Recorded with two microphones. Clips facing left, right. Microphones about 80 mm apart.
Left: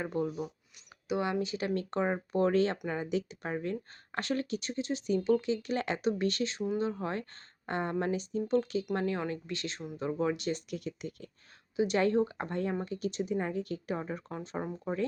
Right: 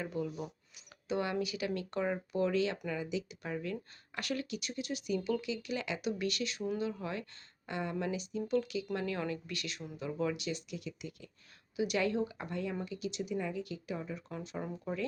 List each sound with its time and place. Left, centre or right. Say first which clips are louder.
0.0 s speech: left 4 dB; left
1.0 s speech: left 3 dB; left